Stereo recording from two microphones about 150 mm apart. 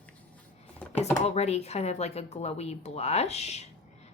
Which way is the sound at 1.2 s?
45° left (ahead or behind).